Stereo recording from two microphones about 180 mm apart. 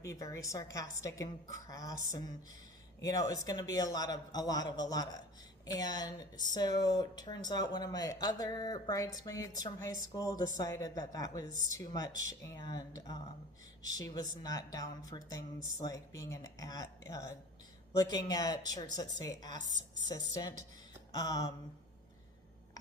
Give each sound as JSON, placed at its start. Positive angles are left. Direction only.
{"t": 0.0, "sound": "a woman's voice", "side_deg": 15}
{"t": 21.1, "sound": "mantra", "side_deg": 20}